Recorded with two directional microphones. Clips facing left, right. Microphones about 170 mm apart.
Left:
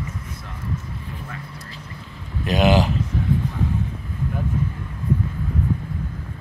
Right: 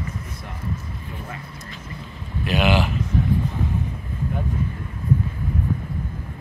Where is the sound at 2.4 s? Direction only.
40° left (ahead or behind).